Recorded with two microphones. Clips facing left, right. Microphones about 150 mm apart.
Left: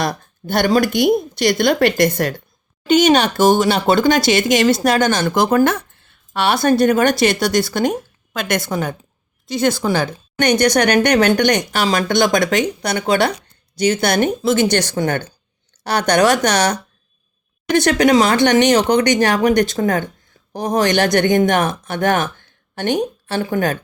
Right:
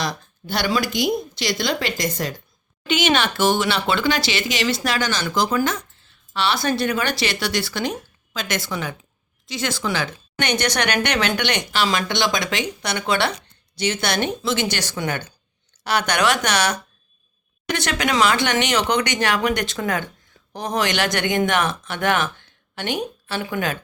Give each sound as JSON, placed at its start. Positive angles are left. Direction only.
{"t": 0.0, "sound": "speech", "side_deg": 50}
{"t": 2.8, "sound": "speech", "side_deg": 40}
{"t": 17.8, "sound": "speech", "side_deg": 35}